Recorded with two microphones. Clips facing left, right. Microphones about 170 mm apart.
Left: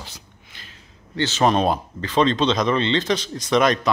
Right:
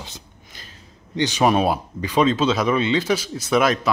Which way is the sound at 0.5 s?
40° right (ahead or behind).